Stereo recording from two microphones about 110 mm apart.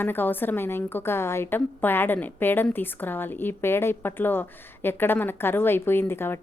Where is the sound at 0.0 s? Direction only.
20° left (ahead or behind).